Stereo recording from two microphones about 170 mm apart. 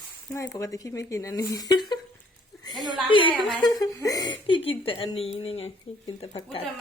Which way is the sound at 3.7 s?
20° left (ahead or behind).